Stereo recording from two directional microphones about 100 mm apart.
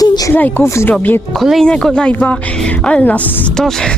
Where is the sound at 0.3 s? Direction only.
20° left (ahead or behind).